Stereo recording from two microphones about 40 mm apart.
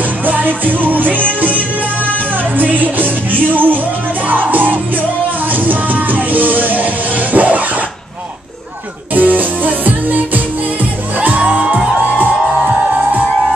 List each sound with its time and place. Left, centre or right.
0.2 s music: right
2.5 s music: right
9.1 s music: right